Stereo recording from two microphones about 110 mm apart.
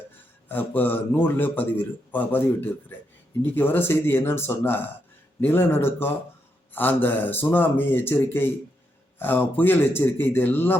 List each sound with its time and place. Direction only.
0.4 s a man's voice: 15° left (ahead or behind)